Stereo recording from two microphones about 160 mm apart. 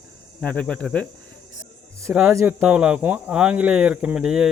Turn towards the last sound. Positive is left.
turn(degrees=-5)  # may be behind; listen again after turning